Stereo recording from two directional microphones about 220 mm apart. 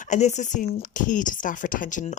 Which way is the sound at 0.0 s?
30° left (ahead or behind).